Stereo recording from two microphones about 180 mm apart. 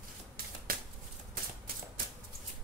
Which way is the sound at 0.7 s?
55° right (ahead or behind).